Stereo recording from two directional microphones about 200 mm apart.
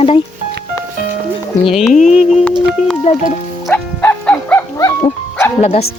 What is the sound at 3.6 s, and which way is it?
Livestock, 10° left (ahead or behind).